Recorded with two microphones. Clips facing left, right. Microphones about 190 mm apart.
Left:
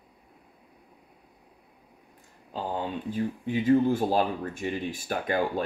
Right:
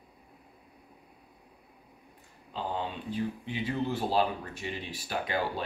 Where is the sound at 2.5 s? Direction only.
45° left (ahead or behind).